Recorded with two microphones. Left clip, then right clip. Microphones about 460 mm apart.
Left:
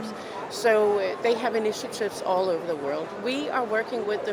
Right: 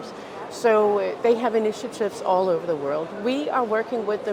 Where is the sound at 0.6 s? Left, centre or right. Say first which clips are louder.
Right 2 dB; right.